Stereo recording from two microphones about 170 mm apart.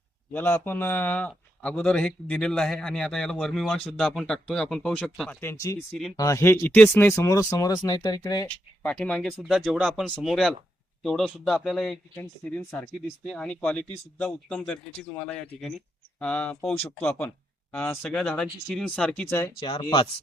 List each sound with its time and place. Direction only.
0.3 s a man's voice: 10° left (ahead or behind)
5.4 s speech: 15° left (ahead or behind)
8.8 s a man's voice: 5° left (ahead or behind)
19.5 s speech: 30° left (ahead or behind)